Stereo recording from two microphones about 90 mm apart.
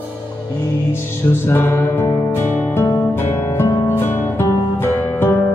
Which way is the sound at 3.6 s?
25° left (ahead or behind).